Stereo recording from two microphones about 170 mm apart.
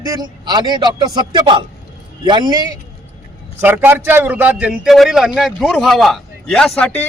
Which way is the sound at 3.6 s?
10° right (ahead or behind).